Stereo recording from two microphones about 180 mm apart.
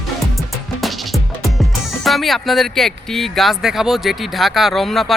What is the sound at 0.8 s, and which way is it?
A man's voice, centre (ahead or behind).